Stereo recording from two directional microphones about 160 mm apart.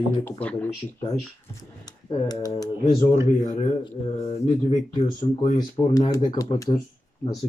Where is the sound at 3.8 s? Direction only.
35° left (ahead or behind).